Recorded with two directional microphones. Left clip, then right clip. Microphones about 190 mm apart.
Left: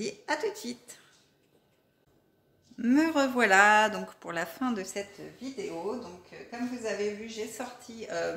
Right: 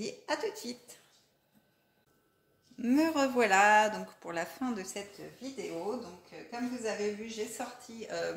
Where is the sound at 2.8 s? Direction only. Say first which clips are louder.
Left 3 dB; 15° left (ahead or behind).